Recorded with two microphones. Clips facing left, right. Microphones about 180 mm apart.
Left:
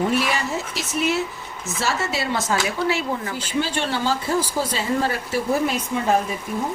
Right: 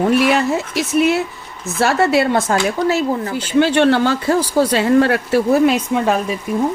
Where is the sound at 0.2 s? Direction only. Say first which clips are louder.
Right 9 dB; 65° right (ahead or behind); by 3.3 s 40° right (ahead or behind).